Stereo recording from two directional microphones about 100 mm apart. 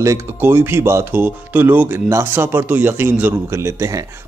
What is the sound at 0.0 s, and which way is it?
Speech, 25° right (ahead or behind).